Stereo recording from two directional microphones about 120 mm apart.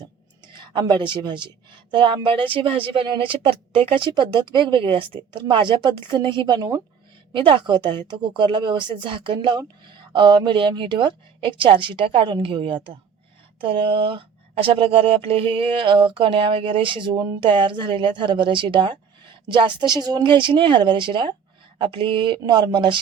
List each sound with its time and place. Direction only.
0.5 s speech: 40° right (ahead or behind)
7.3 s speech: 45° right (ahead or behind)